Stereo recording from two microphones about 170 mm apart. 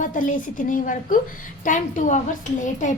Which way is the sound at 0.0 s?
50° left (ahead or behind).